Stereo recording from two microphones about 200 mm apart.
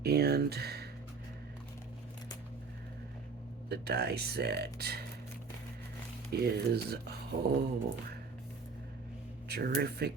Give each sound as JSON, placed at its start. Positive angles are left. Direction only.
{"t": 0.0, "sound": "a sound", "side_deg": -50}
{"t": 3.7, "sound": "speech", "side_deg": -55}
{"t": 6.3, "sound": "speech", "side_deg": -50}
{"t": 9.5, "sound": "speech", "side_deg": -50}